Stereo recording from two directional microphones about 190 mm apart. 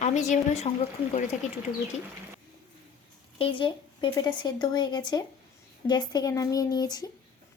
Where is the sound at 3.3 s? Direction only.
25° left (ahead or behind).